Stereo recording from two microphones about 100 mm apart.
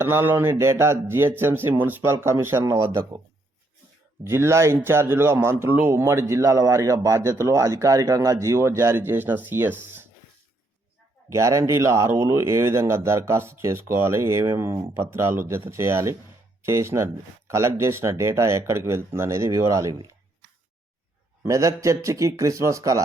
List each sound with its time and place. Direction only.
0.0 s speech: 20° right (ahead or behind)
4.2 s speech: 25° right (ahead or behind)
11.3 s speech: 30° right (ahead or behind)
21.4 s a man's voice: 30° right (ahead or behind)